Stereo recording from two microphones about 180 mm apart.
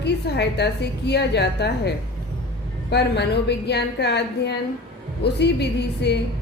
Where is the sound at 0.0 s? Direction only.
65° left (ahead or behind).